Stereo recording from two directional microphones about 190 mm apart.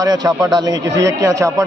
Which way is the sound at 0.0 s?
20° right (ahead or behind).